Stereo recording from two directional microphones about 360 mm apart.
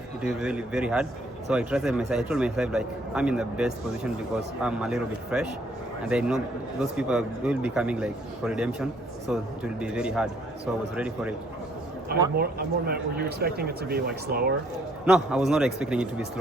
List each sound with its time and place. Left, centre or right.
0.2 s a man's voice: centre
12.4 s speech: right
15.0 s a man's voice: centre